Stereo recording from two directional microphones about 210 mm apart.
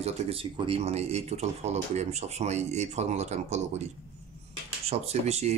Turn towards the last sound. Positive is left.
turn(degrees=-30)  # may be behind; listen again after turning